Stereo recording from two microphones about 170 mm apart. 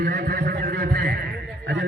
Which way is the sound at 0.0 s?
60° right (ahead or behind).